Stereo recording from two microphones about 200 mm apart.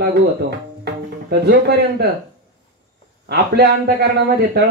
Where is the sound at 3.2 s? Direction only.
55° right (ahead or behind).